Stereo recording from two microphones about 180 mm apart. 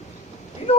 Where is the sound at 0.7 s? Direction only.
30° left (ahead or behind).